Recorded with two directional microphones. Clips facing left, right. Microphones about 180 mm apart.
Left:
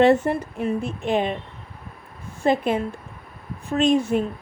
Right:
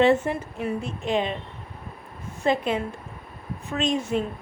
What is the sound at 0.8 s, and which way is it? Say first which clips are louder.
Speech: left 1 dB; 55° left (ahead or behind).